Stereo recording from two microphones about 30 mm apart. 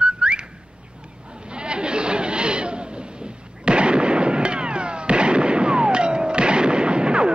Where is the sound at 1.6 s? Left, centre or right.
Right.